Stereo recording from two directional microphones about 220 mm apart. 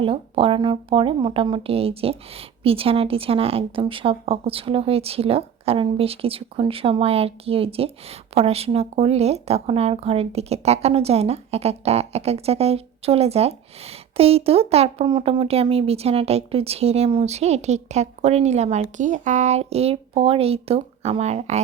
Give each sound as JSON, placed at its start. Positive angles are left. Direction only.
{"t": 0.0, "sound": "speech", "side_deg": -25}